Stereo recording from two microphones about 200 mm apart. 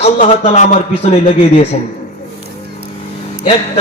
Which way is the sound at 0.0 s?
35° left (ahead or behind).